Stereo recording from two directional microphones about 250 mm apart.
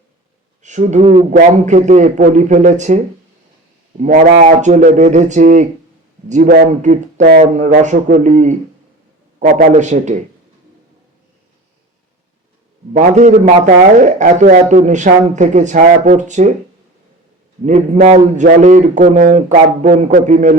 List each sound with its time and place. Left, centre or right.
0.6 s a man's voice: right
4.0 s a man's voice: right
12.9 s a man's voice: right
17.7 s a man's voice: right